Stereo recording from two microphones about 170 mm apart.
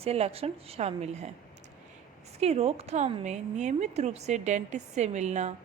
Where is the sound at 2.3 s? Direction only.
40° right (ahead or behind).